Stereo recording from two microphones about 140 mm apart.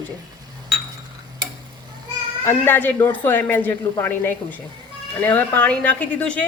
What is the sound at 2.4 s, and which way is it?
A woman's voice, 15° left (ahead or behind).